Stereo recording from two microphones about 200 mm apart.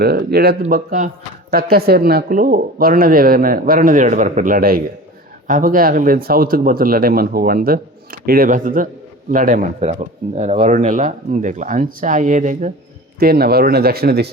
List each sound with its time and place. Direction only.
0.0 s speech: 50° right (ahead or behind)
0.7 s speech: 40° right (ahead or behind)
13.1 s speech: 50° right (ahead or behind)